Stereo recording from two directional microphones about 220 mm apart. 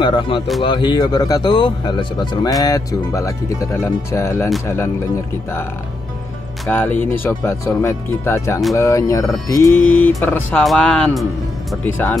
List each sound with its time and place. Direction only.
0.0 s speech: 20° left (ahead or behind)
6.6 s speech: 10° left (ahead or behind)